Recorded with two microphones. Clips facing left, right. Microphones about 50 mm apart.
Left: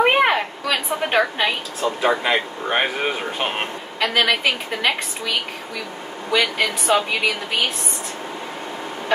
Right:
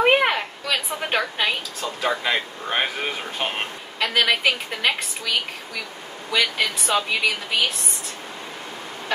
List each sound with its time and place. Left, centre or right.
0.0 s a sound: centre
1.8 s speech: left
4.3 s a woman's voice: centre
6.3 s speech: centre